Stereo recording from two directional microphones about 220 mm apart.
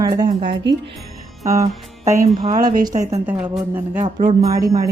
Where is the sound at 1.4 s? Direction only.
15° right (ahead or behind).